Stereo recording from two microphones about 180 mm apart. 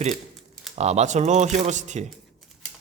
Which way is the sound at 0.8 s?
40° right (ahead or behind).